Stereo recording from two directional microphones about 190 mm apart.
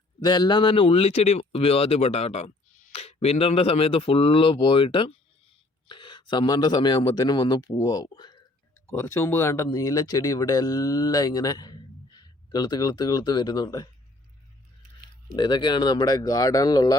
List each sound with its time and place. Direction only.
0.2 s speech: 25° left (ahead or behind)
15.4 s speech: 25° left (ahead or behind)